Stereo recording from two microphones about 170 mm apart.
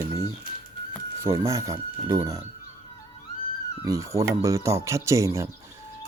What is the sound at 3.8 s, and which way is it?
Mantra, 20° right (ahead or behind).